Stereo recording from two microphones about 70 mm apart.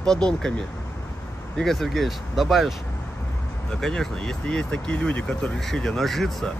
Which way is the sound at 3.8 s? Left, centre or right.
Centre.